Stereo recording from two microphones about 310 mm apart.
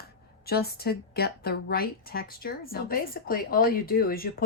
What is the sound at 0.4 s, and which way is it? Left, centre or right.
A woman's voice, left.